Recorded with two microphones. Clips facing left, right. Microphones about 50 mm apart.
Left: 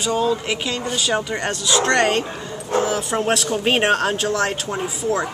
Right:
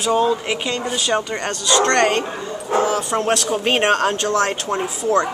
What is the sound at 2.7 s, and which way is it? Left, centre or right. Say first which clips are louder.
Speech: right 2 dB; right.